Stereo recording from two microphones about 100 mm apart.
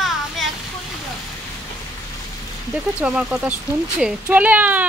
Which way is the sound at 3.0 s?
5° right (ahead or behind).